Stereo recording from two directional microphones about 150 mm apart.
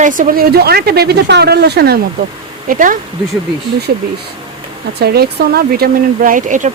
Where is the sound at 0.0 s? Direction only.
65° right (ahead or behind); by 2.0 s 90° right.